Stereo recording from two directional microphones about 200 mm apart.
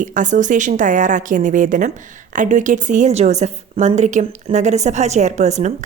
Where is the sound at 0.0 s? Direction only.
40° right (ahead or behind).